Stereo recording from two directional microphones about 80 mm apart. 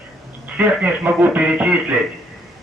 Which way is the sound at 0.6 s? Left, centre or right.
Right.